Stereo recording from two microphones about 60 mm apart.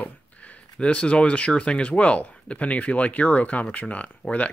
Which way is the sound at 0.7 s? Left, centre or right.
Centre.